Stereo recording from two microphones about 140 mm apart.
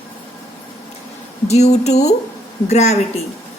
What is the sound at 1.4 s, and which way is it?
A woman's voice, 50° left (ahead or behind).